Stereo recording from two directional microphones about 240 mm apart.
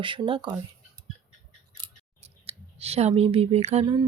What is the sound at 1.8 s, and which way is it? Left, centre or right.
Speech, right.